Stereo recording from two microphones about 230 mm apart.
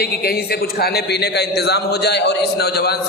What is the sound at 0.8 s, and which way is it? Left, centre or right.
A man's voice, left.